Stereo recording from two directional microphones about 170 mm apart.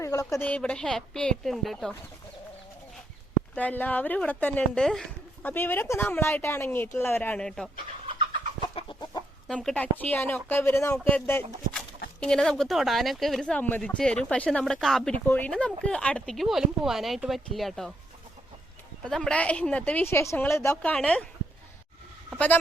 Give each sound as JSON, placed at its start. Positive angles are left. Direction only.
{"t": 0.0, "sound": "speech", "side_deg": 20}
{"t": 3.5, "sound": "speech", "side_deg": 10}
{"t": 8.6, "sound": "chicken", "side_deg": 25}
{"t": 9.5, "sound": "speech", "side_deg": 5}
{"t": 19.0, "sound": "speech", "side_deg": 5}